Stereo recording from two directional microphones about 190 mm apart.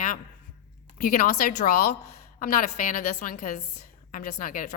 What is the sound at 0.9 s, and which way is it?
A woman's voice, 45° left (ahead or behind).